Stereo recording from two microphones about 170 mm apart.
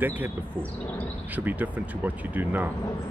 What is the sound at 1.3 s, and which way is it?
Speech, 10° right (ahead or behind).